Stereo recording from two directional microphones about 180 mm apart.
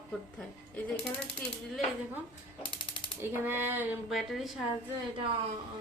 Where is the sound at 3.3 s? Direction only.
10° right (ahead or behind).